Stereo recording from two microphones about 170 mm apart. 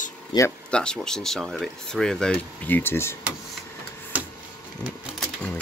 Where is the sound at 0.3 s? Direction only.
25° left (ahead or behind).